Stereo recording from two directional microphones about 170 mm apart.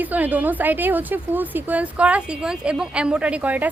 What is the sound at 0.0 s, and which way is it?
A woman's voice, 10° right (ahead or behind).